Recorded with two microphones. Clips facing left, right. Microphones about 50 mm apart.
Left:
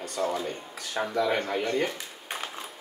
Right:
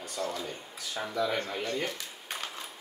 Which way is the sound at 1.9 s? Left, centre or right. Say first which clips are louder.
Left 2 dB; centre.